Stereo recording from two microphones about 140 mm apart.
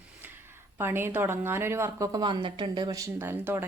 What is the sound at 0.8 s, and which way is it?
A woman's voice, 15° right (ahead or behind).